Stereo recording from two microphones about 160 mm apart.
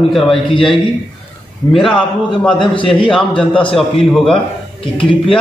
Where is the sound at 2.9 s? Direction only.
5° left (ahead or behind).